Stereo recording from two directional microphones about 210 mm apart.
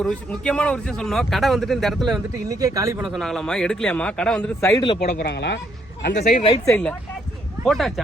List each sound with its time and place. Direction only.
0.0 s speech: 5° left (ahead or behind)
2.5 s speech: 15° right (ahead or behind)
3.0 s speech: centre (ahead or behind)
4.8 s speech: 25° left (ahead or behind)
5.1 s speech: 50° left (ahead or behind)
6.2 s speech: 30° left (ahead or behind)
6.7 s speech: 5° left (ahead or behind)